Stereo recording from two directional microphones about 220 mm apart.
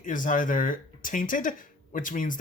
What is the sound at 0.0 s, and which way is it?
Speech, 35° left (ahead or behind).